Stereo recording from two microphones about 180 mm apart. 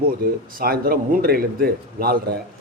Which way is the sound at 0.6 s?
55° right (ahead or behind).